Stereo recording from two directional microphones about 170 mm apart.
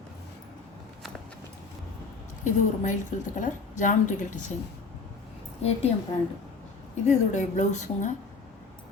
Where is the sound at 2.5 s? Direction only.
45° left (ahead or behind).